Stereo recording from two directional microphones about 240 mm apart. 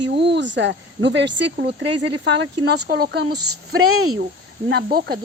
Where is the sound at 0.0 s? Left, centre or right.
Right.